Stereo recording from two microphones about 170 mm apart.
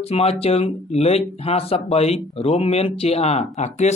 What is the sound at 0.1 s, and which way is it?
Speech, 35° left (ahead or behind).